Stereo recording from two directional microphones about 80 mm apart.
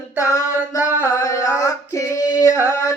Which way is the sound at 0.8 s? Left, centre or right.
Right.